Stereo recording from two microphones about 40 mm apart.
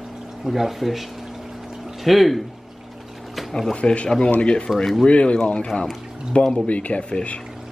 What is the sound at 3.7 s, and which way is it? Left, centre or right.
Speech, left.